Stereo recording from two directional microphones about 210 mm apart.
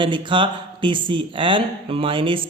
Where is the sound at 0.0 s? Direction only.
25° right (ahead or behind).